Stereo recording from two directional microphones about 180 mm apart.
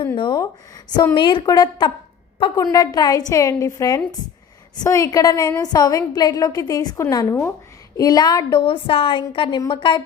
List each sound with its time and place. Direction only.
0.2 s a woman's voice: 25° left (ahead or behind)